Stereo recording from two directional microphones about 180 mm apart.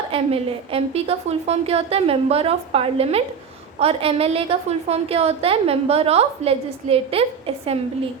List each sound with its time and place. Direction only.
0.1 s a woman's voice: 30° right (ahead or behind)